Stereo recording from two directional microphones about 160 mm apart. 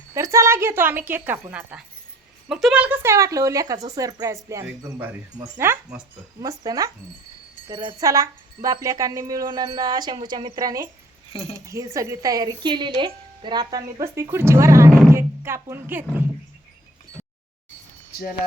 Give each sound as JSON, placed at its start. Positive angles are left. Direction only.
{"t": 0.1, "sound": "a woman's voice", "side_deg": -20}
{"t": 6.4, "sound": "speech", "side_deg": -20}
{"t": 7.9, "sound": "speech", "side_deg": -20}
{"t": 11.3, "sound": "speech", "side_deg": 35}
{"t": 11.5, "sound": "speech", "side_deg": -20}